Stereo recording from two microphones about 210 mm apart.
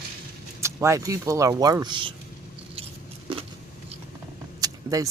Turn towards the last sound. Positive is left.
turn(degrees=-15)  # may be behind; listen again after turning